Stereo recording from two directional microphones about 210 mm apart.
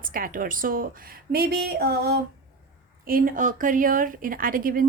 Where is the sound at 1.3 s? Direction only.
45° right (ahead or behind).